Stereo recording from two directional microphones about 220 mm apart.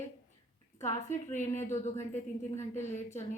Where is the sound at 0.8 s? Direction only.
35° left (ahead or behind).